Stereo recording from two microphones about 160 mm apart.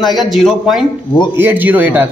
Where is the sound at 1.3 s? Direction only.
10° right (ahead or behind).